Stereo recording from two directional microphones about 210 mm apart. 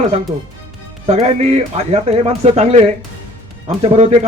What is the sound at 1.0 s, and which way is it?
A man's voice, 30° right (ahead or behind).